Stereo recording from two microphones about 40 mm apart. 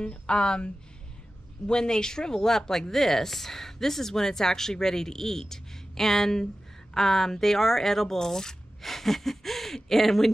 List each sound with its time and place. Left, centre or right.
0.0 s speech: left
1.7 s speech: centre